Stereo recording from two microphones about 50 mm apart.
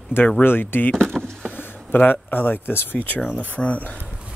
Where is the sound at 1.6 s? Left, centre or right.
Left.